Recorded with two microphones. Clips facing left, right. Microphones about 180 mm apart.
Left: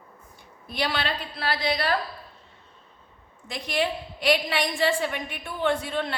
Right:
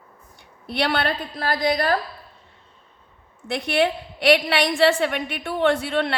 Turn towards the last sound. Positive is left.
turn(degrees=-70)  # may be behind; listen again after turning